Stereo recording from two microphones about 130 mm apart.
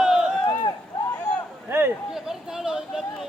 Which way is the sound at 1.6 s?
15° right (ahead or behind).